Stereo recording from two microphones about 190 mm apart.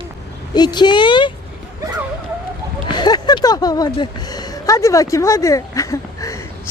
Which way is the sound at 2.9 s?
20° left (ahead or behind).